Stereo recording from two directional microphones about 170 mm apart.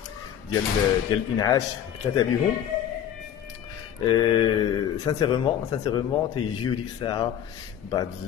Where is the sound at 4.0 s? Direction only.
25° left (ahead or behind).